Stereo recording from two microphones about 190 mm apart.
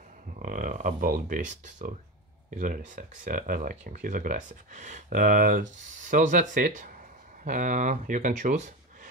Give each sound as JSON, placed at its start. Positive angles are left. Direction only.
{"t": 0.4, "sound": "speech", "side_deg": -45}